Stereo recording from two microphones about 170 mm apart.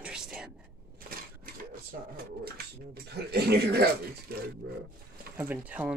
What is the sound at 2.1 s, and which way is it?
Speech, 65° right (ahead or behind).